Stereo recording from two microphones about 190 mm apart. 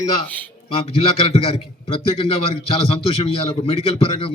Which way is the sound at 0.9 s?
30° left (ahead or behind).